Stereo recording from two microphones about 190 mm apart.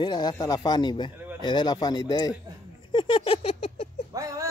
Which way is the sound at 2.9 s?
25° left (ahead or behind).